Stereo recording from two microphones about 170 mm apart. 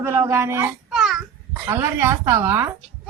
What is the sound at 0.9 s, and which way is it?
Babbling, 5° right (ahead or behind).